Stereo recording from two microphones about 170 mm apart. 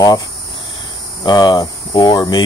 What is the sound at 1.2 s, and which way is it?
Cricket, 25° left (ahead or behind).